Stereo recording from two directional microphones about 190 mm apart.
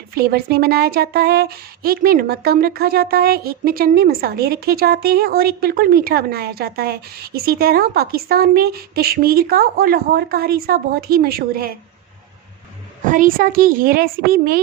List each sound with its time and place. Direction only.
0.1 s speech: 55° right (ahead or behind)
13.1 s speech: 45° right (ahead or behind)